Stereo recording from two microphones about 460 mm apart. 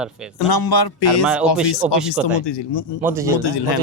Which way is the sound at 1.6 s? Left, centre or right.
Left.